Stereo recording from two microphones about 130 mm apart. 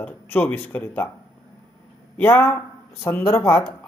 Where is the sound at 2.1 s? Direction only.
15° left (ahead or behind).